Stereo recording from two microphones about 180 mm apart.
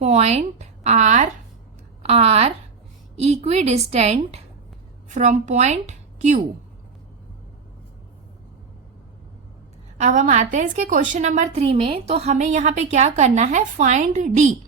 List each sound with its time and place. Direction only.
0.0 s a woman's voice: 35° right (ahead or behind)
10.0 s a woman's voice: 40° right (ahead or behind)